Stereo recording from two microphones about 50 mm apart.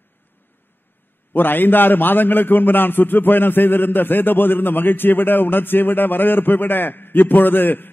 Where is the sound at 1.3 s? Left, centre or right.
Left.